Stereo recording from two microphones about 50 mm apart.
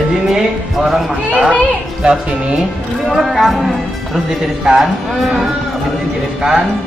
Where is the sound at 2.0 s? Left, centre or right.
Centre.